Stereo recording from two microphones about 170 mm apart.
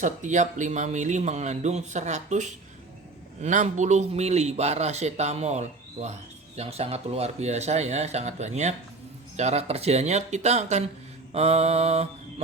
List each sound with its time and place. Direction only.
0.0 s a man's voice: 45° right (ahead or behind)